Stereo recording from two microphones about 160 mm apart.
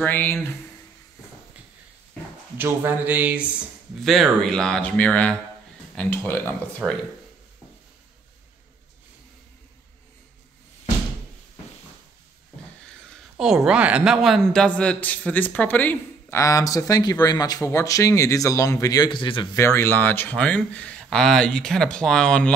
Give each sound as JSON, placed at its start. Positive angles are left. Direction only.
{"t": 0.0, "sound": "speech", "side_deg": 10}
{"t": 2.5, "sound": "speech", "side_deg": -15}
{"t": 4.0, "sound": "speech", "side_deg": 0}
{"t": 6.8, "sound": "speech", "side_deg": -10}
{"t": 13.7, "sound": "a man's voice", "side_deg": -10}
{"t": 19.5, "sound": "speech", "side_deg": 15}